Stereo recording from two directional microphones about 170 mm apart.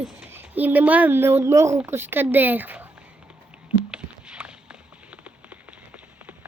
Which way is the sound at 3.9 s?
5° right (ahead or behind).